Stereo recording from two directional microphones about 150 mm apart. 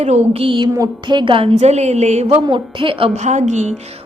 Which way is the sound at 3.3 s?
50° right (ahead or behind).